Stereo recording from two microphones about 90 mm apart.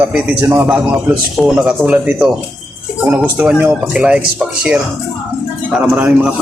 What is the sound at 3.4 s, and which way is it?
Speech, 15° right (ahead or behind).